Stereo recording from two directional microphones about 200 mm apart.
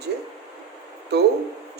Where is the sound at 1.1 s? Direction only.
55° right (ahead or behind).